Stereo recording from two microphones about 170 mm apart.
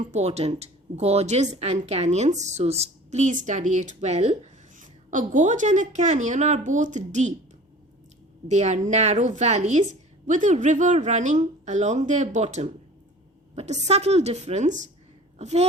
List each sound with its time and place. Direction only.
0.0 s a woman's voice: 40° right (ahead or behind)
8.4 s a woman's voice: 45° right (ahead or behind)